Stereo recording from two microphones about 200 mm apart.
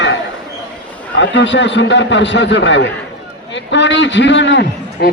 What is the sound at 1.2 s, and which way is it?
A man's voice, 65° left (ahead or behind).